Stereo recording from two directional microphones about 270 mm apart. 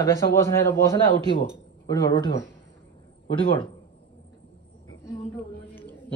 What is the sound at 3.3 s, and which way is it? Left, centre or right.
Speech, centre.